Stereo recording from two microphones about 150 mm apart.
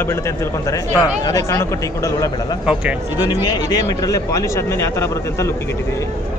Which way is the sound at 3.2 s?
25° left (ahead or behind).